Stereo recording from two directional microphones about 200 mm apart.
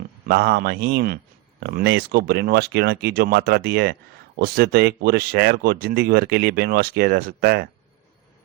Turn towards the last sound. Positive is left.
turn(degrees=-50)  # may be behind; listen again after turning